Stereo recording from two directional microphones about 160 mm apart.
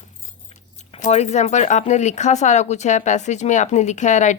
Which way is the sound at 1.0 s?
45° left (ahead or behind).